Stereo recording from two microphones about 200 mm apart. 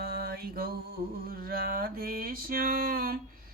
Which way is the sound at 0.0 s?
50° right (ahead or behind).